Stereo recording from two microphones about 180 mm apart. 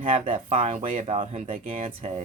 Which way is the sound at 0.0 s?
40° right (ahead or behind).